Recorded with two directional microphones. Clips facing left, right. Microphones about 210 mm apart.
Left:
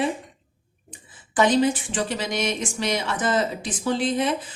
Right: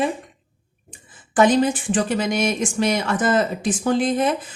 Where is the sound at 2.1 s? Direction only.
50° right (ahead or behind).